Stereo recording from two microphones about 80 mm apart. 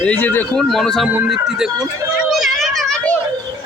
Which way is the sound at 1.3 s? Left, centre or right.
Centre.